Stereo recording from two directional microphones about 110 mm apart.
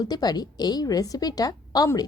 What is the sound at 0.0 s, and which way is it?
A woman's voice, 35° left (ahead or behind).